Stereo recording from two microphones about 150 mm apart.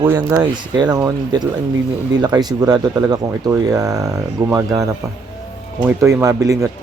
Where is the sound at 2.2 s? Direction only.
25° right (ahead or behind).